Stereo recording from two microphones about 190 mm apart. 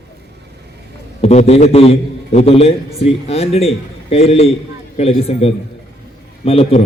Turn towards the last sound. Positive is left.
turn(degrees=30)  # may be behind; listen again after turning